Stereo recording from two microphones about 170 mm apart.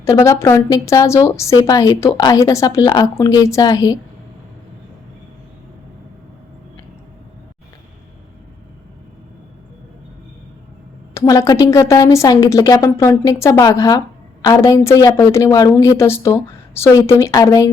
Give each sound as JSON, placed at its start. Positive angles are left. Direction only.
{"t": 0.0, "sound": "a woman's voice", "side_deg": 15}
{"t": 11.1, "sound": "a woman's voice", "side_deg": 20}